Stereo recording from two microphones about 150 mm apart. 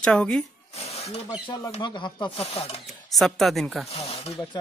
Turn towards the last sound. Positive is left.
turn(degrees=0)  # may be behind; listen again after turning